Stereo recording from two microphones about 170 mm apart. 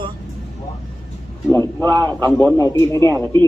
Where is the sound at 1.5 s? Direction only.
10° left (ahead or behind).